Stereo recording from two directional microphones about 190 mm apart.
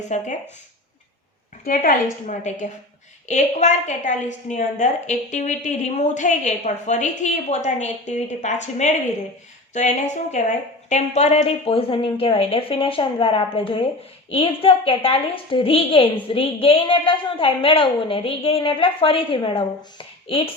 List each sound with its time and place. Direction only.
0.1 s speech: 40° left (ahead or behind)
1.6 s a woman's voice: 45° left (ahead or behind); by 20.5 s 30° left (ahead or behind)